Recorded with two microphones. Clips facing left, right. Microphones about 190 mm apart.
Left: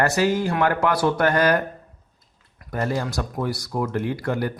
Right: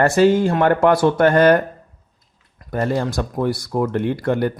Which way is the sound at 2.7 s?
55° right (ahead or behind).